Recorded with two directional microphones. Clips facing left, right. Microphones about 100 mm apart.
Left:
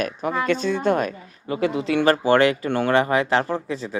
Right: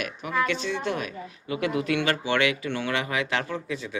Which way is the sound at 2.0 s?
40° left (ahead or behind).